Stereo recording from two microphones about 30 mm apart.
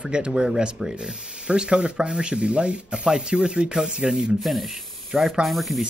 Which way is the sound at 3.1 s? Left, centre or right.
Right.